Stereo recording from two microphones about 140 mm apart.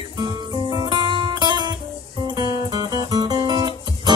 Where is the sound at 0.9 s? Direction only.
30° right (ahead or behind).